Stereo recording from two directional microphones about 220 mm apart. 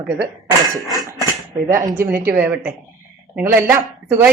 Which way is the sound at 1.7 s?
10° right (ahead or behind).